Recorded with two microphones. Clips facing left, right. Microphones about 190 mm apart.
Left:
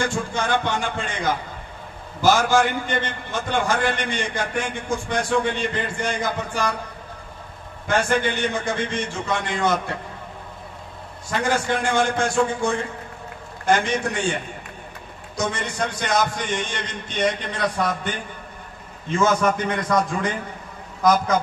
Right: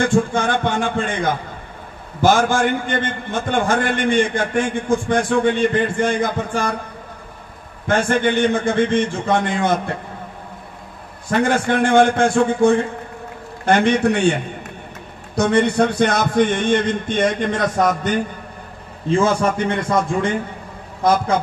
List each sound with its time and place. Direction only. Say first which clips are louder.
0.1 s a man's voice: right 6 dB; 55° right (ahead or behind)
8.2 s a man's voice: right 7 dB; 55° right (ahead or behind)
11.2 s a man's voice: right 5 dB; 55° right (ahead or behind)
15.3 s a man's voice: right 11 dB; 60° right (ahead or behind); by 18.1 s 45° right (ahead or behind)
19.0 s a man's voice: right 3 dB; 30° right (ahead or behind)